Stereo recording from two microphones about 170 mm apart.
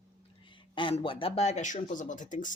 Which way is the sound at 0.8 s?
30° left (ahead or behind).